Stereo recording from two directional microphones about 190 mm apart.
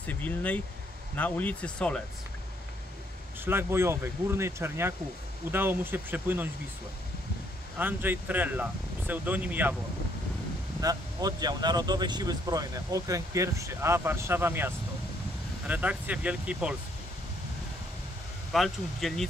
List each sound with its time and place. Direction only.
0.0 s speech: 10° left (ahead or behind)
3.4 s speech: 10° right (ahead or behind)
7.7 s speech: 10° right (ahead or behind)
10.8 s speech: 20° right (ahead or behind)
18.5 s speech: centre (ahead or behind)